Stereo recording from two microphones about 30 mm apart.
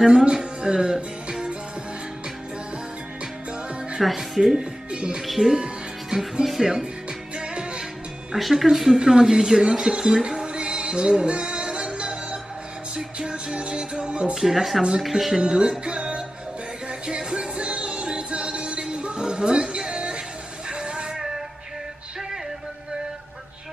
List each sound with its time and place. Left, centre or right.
0.2 s speech: right
0.9 s music: centre
4.0 s speech: centre
4.6 s speech: right
5.4 s speech: right
6.4 s speech: centre
8.4 s a woman's voice: centre; by 10.4 s right
10.4 s music: right
14.3 s speech: centre
15.3 s music: right
17.2 s music: right
20.7 s a sound: right